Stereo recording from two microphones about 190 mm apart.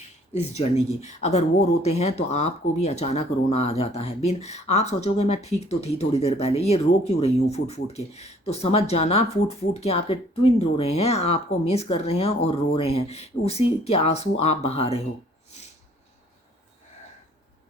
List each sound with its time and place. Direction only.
0.6 s speech: 30° left (ahead or behind)